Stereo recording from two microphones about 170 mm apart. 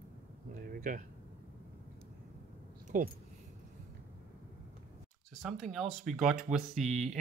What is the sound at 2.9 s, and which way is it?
Speech, 50° right (ahead or behind).